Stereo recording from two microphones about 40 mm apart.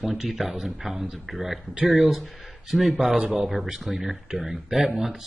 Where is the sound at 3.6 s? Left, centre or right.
Centre.